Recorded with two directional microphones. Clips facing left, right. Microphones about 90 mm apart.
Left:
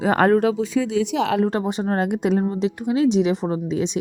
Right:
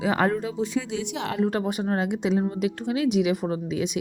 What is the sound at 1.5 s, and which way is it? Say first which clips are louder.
Speech: left 3 dB; 25° left (ahead or behind).